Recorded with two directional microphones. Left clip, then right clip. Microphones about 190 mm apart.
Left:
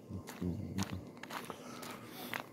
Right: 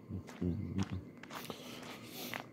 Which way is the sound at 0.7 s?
45° left (ahead or behind).